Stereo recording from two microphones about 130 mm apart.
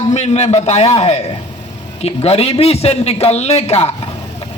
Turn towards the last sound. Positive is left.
turn(degrees=55)  # may be behind; listen again after turning